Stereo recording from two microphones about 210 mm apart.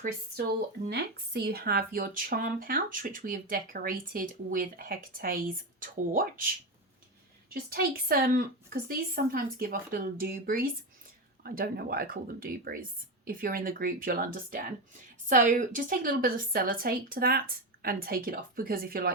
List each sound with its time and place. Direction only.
0.9 s speech: 50° right (ahead or behind)
7.5 s speech: 45° right (ahead or behind)